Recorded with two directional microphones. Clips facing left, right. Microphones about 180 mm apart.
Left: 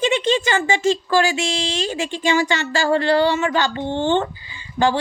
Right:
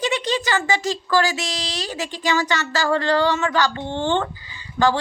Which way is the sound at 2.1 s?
20° left (ahead or behind).